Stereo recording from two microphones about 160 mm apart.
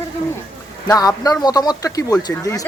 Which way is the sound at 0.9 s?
25° left (ahead or behind).